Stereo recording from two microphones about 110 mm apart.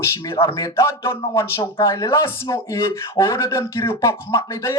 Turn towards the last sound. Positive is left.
turn(degrees=25)  # may be behind; listen again after turning